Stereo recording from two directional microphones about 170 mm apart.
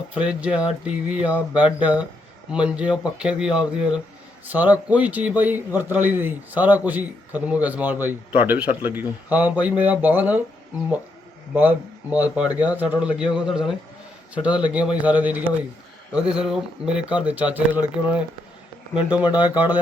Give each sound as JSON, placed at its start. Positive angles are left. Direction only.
{"t": 0.1, "sound": "a man's voice", "side_deg": -5}
{"t": 1.6, "sound": "speech", "side_deg": 25}
{"t": 2.5, "sound": "a man's voice", "side_deg": -5}
{"t": 12.1, "sound": "a man's voice", "side_deg": -10}